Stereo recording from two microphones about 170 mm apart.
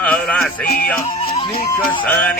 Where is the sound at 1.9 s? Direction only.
10° left (ahead or behind).